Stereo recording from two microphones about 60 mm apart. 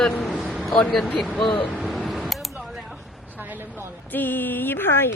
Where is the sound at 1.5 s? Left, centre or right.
Left.